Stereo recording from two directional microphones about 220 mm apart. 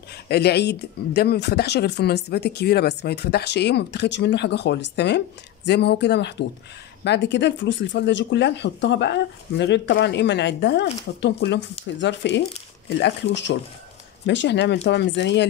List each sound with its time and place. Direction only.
0.3 s speech: 45° left (ahead or behind)